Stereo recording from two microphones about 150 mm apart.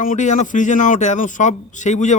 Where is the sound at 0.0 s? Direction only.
60° left (ahead or behind).